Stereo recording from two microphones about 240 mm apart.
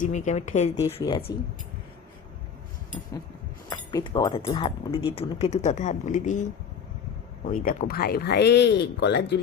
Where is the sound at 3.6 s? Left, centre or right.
Centre.